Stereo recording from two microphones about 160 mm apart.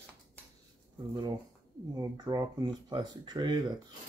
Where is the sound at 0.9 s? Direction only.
25° right (ahead or behind).